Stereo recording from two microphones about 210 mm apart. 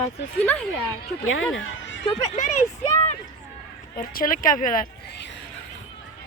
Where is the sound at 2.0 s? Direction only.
35° left (ahead or behind).